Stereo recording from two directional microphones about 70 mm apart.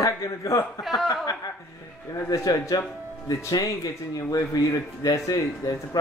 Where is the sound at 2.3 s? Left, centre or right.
Left.